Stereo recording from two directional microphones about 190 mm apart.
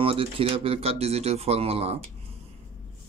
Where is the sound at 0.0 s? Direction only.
30° right (ahead or behind).